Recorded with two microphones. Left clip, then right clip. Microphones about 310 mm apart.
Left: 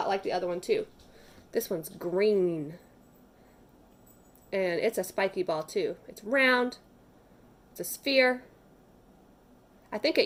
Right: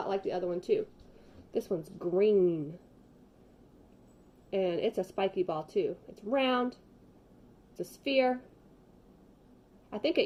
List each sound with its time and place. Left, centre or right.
0.0 s speech: centre
2.0 s speech: centre
4.5 s speech: centre
7.8 s speech: centre
9.9 s speech: centre